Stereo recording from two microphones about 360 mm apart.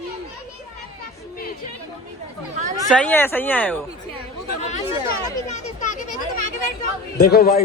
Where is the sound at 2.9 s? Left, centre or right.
Centre.